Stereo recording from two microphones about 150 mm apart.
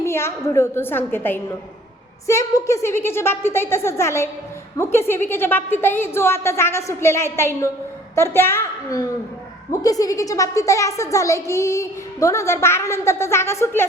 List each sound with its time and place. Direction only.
0.0 s a woman's voice: 15° left (ahead or behind)